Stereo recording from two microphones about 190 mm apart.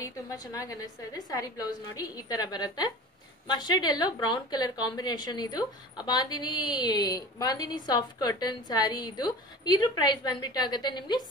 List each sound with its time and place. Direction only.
0.3 s a woman's voice: 15° left (ahead or behind)